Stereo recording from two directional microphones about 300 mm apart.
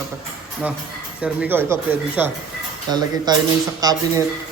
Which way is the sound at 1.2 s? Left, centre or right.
Centre.